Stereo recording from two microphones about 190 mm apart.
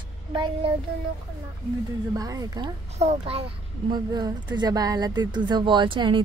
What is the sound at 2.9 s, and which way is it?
Speech, 35° right (ahead or behind).